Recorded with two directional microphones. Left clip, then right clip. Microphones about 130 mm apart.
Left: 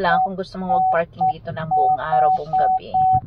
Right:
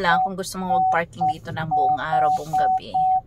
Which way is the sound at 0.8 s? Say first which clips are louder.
Left 2 dB; 35° right (ahead or behind).